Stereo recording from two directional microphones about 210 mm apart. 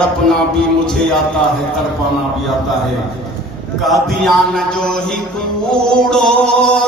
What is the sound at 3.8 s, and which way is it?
Mantra, centre (ahead or behind).